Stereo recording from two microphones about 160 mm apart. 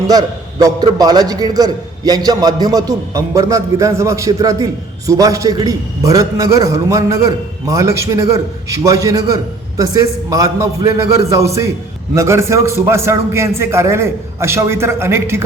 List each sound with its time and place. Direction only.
0.1 s a man's voice: 25° right (ahead or behind)